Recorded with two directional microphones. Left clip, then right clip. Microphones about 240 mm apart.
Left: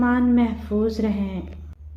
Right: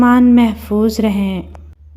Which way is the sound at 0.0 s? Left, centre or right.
Right.